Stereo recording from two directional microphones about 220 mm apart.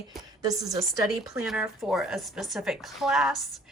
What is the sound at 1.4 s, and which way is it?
A woman's voice, centre (ahead or behind).